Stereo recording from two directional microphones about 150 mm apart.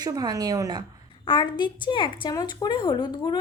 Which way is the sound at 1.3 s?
30° left (ahead or behind).